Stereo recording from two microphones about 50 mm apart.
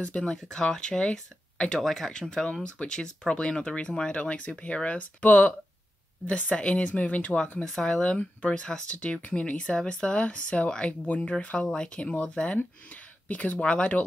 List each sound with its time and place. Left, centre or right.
0.0 s speech: left
7.8 s speech: centre